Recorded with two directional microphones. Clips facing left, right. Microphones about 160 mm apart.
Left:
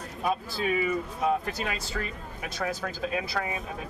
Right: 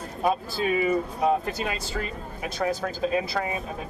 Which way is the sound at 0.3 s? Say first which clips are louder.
Right 3 dB; 35° right (ahead or behind).